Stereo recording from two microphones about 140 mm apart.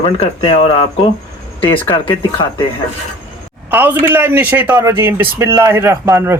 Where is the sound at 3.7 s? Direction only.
15° right (ahead or behind).